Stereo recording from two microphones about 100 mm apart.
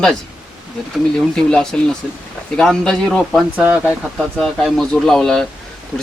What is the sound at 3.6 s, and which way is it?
Speech, 15° right (ahead or behind).